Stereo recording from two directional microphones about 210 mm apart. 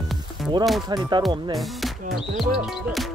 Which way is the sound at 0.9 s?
20° right (ahead or behind).